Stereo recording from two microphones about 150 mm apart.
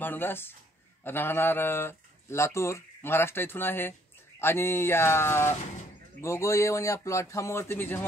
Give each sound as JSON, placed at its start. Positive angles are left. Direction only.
{"t": 0.0, "sound": "a man's voice", "side_deg": 15}